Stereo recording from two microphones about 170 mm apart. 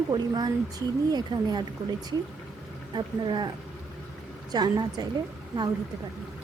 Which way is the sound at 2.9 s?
25° right (ahead or behind).